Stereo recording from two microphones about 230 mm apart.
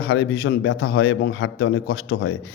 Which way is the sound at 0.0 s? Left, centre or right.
Left.